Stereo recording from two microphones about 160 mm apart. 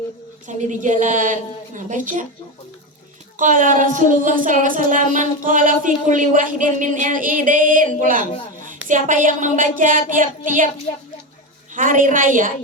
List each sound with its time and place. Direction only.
0.4 s a woman's voice: 50° right (ahead or behind)
3.3 s speech: 55° right (ahead or behind)
11.7 s speech: 55° right (ahead or behind)